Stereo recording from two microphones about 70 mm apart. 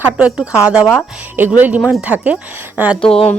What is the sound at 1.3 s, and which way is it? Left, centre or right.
Speech, right.